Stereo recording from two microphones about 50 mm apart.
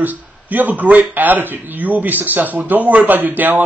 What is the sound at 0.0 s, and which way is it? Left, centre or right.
A man's voice, right.